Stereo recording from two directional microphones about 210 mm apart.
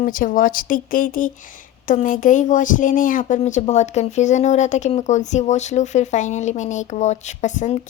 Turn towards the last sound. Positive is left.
turn(degrees=35)  # may be behind; listen again after turning